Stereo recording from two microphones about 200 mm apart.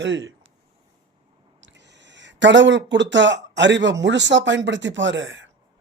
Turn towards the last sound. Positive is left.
turn(degrees=-70)  # may be behind; listen again after turning